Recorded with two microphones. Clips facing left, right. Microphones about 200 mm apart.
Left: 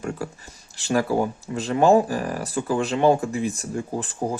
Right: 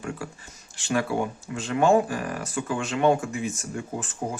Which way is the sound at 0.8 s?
35° left (ahead or behind).